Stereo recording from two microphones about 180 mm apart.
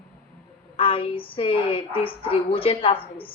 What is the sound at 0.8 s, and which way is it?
A woman's voice, 30° left (ahead or behind).